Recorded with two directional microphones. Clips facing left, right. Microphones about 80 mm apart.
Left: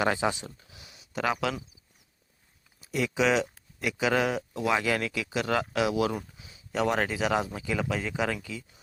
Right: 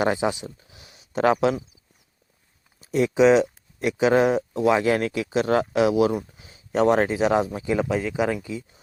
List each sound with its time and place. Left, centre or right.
0.0 s speech: centre
0.7 s a sound: right
2.8 s speech: right